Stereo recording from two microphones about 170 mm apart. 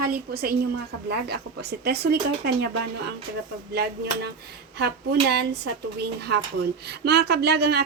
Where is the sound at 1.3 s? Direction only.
70° right (ahead or behind).